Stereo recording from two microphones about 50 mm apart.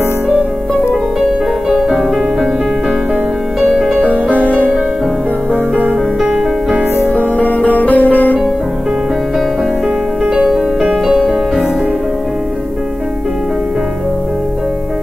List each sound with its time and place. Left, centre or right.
1.7 s music: centre
3.6 s music: centre
7.2 s music: left
10.2 s music: centre